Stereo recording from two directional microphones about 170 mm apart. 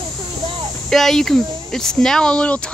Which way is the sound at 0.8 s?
Centre (ahead or behind).